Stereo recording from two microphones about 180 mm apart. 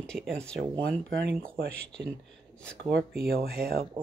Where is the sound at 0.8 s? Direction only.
55° right (ahead or behind).